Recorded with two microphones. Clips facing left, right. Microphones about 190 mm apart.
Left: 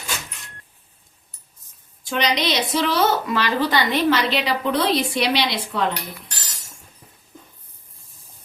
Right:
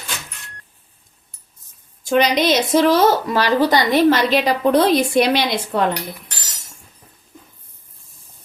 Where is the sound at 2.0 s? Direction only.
50° right (ahead or behind).